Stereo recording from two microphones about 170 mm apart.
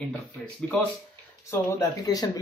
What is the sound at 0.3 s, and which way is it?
A man's voice, 10° left (ahead or behind).